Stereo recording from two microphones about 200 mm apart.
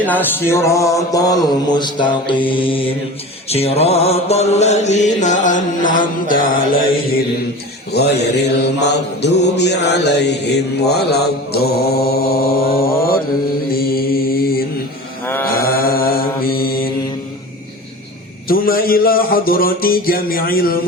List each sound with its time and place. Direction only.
0.0 s a sound: 10° left (ahead or behind); by 2.9 s 25° left (ahead or behind)
3.5 s mantra: 30° left (ahead or behind)
7.9 s mantra: 55° left (ahead or behind)
15.2 s mantra: 10° left (ahead or behind)
15.4 s mantra: 50° left (ahead or behind)
18.4 s a man's voice: 45° left (ahead or behind)